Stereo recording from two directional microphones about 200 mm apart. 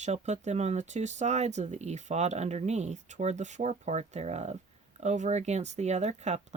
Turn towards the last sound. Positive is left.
turn(degrees=-35)  # may be behind; listen again after turning